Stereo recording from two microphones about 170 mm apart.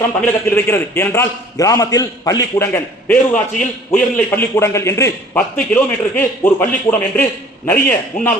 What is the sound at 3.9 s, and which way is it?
A man's voice, 10° left (ahead or behind).